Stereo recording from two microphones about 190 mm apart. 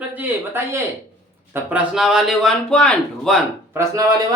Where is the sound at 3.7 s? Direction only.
15° right (ahead or behind).